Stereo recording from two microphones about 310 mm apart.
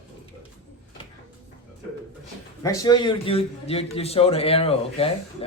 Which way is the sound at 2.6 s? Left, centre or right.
Centre.